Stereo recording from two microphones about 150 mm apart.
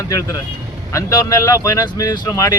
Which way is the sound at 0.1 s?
20° left (ahead or behind).